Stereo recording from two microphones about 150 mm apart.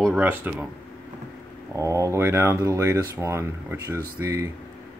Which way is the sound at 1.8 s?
20° right (ahead or behind).